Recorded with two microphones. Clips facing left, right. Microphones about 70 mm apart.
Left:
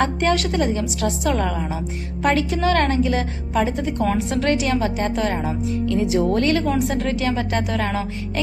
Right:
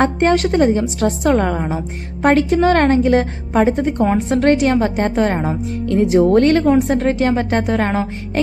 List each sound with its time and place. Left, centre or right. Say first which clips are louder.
0.0 s speech: right 5 dB; right
4.0 s a woman's voice: right 5 dB; right
4.4 s speech: right 8 dB; right